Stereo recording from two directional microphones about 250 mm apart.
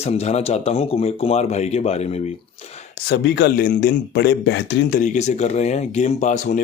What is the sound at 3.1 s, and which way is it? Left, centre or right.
Speech, left.